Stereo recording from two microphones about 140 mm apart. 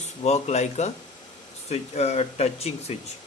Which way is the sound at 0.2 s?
50° left (ahead or behind).